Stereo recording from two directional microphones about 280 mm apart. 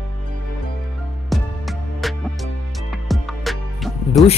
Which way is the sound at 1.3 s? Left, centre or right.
Centre.